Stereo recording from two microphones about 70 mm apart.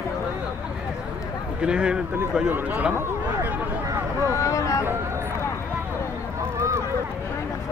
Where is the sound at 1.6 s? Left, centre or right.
Centre.